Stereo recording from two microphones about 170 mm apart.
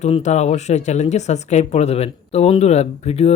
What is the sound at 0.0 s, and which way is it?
Speech, 40° left (ahead or behind).